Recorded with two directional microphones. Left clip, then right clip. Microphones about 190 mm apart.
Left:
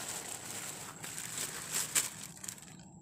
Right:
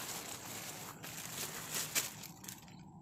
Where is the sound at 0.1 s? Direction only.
30° left (ahead or behind).